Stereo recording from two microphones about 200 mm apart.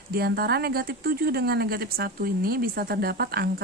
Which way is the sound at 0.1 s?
50° right (ahead or behind).